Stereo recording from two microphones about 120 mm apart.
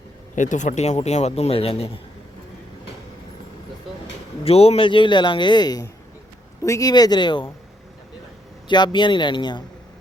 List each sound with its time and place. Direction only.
0.3 s a man's voice: 90° left; by 1.9 s 55° left (ahead or behind)
4.4 s a man's voice: 55° left (ahead or behind); by 7.4 s 40° left (ahead or behind)
8.6 s a man's voice: 40° left (ahead or behind)